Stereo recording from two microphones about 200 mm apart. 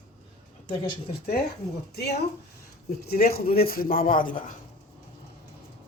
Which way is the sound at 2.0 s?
55° left (ahead or behind).